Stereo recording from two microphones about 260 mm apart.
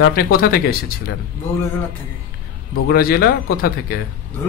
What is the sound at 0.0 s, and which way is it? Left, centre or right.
Speech, left.